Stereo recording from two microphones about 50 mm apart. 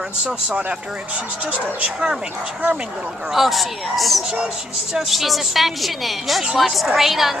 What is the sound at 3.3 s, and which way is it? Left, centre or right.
A woman's voice, centre.